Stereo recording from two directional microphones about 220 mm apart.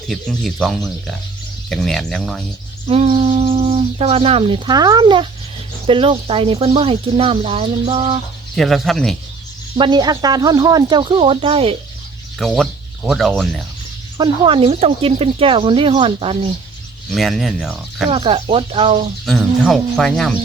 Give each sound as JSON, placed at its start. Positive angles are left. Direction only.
{"t": 0.1, "sound": "speech", "side_deg": 0}
{"t": 2.8, "sound": "speech", "side_deg": -25}
{"t": 8.5, "sound": "speech", "side_deg": 0}
{"t": 9.7, "sound": "speech", "side_deg": -20}
{"t": 12.4, "sound": "speech", "side_deg": 0}
{"t": 14.2, "sound": "speech", "side_deg": -20}
{"t": 17.1, "sound": "speech", "side_deg": 0}
{"t": 18.1, "sound": "speech", "side_deg": -25}
{"t": 19.2, "sound": "speech", "side_deg": 0}